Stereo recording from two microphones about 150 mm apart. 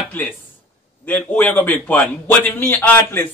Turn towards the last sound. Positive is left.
turn(degrees=10)  # may be behind; listen again after turning